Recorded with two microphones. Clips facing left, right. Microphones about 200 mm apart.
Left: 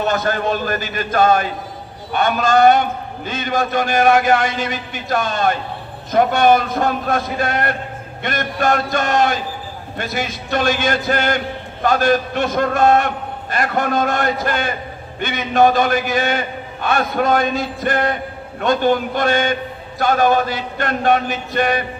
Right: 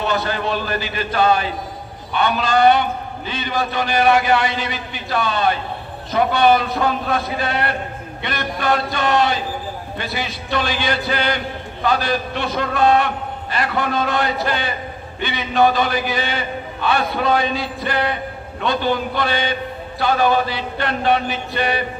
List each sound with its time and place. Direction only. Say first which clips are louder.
0.0 s a man's voice: left 2 dB; 45° left (ahead or behind)